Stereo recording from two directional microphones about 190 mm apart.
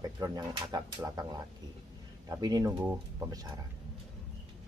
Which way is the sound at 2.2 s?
20° right (ahead or behind).